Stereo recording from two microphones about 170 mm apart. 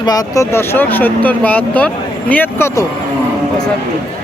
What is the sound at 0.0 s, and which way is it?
Speech, 20° left (ahead or behind).